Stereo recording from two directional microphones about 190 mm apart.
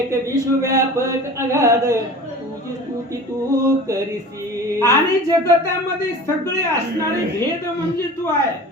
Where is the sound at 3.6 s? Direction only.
15° right (ahead or behind).